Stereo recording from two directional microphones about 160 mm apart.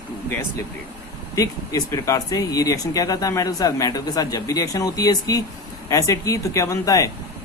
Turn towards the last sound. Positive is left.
turn(degrees=20)  # may be behind; listen again after turning